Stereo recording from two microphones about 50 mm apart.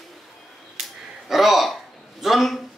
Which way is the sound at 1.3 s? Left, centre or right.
Centre.